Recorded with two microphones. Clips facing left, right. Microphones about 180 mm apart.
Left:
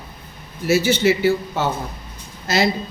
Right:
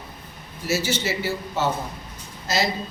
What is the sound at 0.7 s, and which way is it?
A man's voice, 55° left (ahead or behind).